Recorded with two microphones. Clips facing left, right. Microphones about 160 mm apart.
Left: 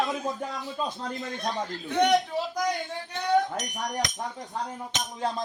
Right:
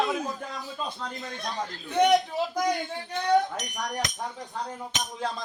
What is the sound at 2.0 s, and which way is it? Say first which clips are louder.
Speech: right 1 dB; 5° right (ahead or behind).